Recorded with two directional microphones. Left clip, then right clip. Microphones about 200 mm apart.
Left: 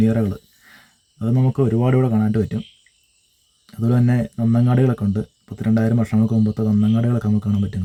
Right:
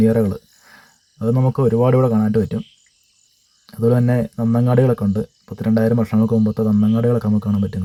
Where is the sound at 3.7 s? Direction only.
10° right (ahead or behind).